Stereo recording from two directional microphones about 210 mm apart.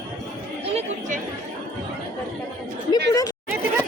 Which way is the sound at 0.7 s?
35° right (ahead or behind).